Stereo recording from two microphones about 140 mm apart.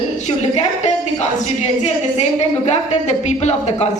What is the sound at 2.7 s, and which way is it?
A woman's voice, 55° left (ahead or behind).